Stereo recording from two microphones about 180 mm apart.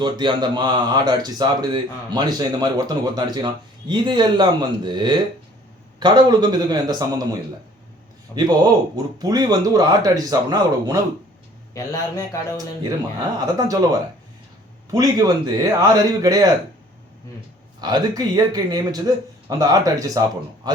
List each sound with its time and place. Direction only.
0.0 s speech: 25° right (ahead or behind)
8.4 s speech: 20° right (ahead or behind)
11.7 s a man's voice: 15° left (ahead or behind)
13.4 s speech: 20° right (ahead or behind)
17.7 s speech: 25° right (ahead or behind)